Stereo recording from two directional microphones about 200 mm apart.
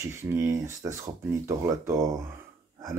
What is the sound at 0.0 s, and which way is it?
Speech, 10° right (ahead or behind).